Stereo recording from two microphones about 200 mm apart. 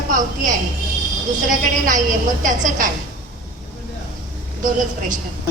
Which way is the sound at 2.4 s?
40° right (ahead or behind).